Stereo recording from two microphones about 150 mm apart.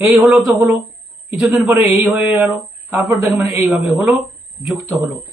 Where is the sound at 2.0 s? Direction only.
15° right (ahead or behind).